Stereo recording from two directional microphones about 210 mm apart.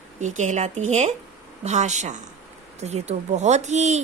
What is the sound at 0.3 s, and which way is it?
Speech, 35° right (ahead or behind).